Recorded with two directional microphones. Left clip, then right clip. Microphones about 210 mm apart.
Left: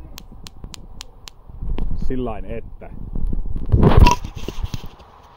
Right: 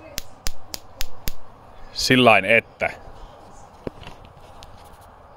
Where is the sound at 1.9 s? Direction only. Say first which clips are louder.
Right 14 dB; 70° right (ahead or behind); by 2.9 s 55° right (ahead or behind).